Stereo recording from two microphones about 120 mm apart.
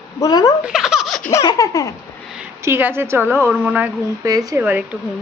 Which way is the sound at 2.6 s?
20° right (ahead or behind).